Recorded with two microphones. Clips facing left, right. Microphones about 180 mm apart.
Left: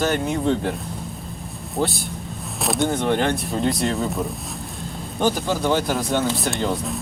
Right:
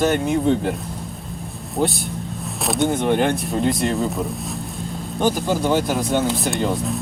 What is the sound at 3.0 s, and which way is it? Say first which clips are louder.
Speech: right 2 dB; 15° right (ahead or behind).